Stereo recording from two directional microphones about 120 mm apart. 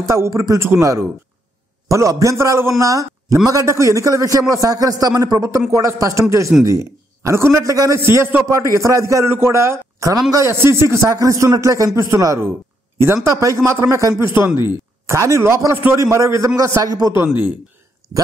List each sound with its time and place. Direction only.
0.0 s a man's voice: 25° right (ahead or behind)
18.0 s dog: 30° right (ahead or behind)